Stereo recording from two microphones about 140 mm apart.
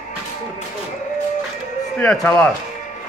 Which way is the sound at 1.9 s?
5° left (ahead or behind).